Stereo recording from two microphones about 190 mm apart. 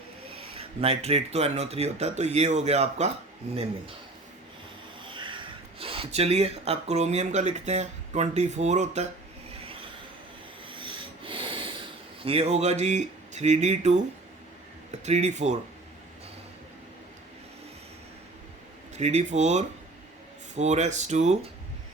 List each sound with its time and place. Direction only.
0.5 s speech: 30° right (ahead or behind)
5.1 s speech: 25° right (ahead or behind)
10.7 s snort: 25° right (ahead or behind)
12.2 s speech: 30° right (ahead or behind)
15.0 s speech: 35° right (ahead or behind)
18.9 s speech: 35° right (ahead or behind)